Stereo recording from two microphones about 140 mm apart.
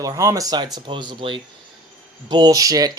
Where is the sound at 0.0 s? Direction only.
25° right (ahead or behind).